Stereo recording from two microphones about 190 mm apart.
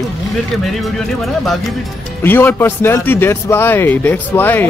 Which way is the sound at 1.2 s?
Centre (ahead or behind).